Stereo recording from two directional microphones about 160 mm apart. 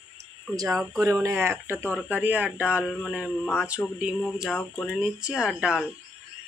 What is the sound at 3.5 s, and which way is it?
Speech, 5° right (ahead or behind).